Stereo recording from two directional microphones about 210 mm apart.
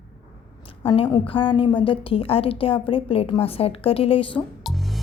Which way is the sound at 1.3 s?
25° left (ahead or behind).